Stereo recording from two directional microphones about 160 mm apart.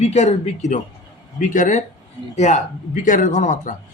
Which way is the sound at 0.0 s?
45° left (ahead or behind).